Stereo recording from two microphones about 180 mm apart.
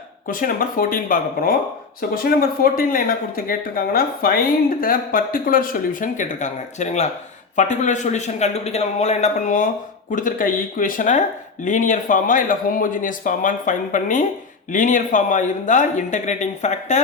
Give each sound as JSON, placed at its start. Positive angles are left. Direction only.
{"t": 0.3, "sound": "speech", "side_deg": 50}